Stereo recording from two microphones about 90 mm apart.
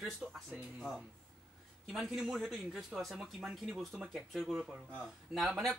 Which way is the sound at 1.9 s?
5° right (ahead or behind).